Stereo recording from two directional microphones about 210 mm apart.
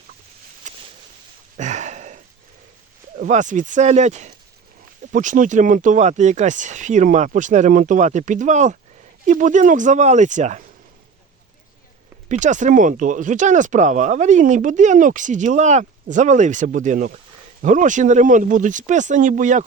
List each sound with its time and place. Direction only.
0.7 s a sound: 35° right (ahead or behind)
3.2 s speech: 35° right (ahead or behind)
12.3 s speech: 35° right (ahead or behind)